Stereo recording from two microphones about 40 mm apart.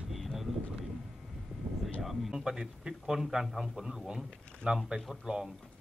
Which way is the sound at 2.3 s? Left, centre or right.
Centre.